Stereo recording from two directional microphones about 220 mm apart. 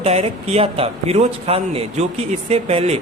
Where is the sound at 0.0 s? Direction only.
30° right (ahead or behind).